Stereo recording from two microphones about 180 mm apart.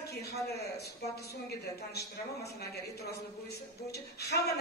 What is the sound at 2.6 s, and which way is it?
A man's voice, 65° left (ahead or behind).